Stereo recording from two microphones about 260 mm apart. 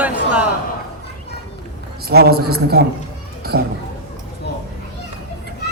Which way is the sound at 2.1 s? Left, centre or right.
Right.